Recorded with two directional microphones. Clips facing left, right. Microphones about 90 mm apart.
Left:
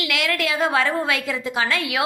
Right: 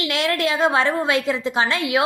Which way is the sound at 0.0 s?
30° right (ahead or behind).